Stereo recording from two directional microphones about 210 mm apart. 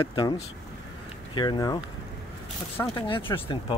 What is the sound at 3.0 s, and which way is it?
Speech, 25° left (ahead or behind).